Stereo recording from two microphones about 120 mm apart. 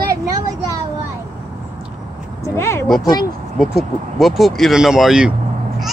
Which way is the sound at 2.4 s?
25° left (ahead or behind).